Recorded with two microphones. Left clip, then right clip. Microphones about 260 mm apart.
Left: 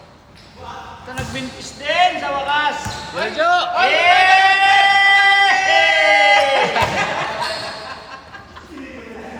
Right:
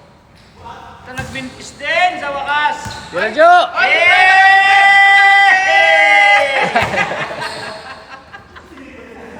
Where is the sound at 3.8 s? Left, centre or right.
Centre.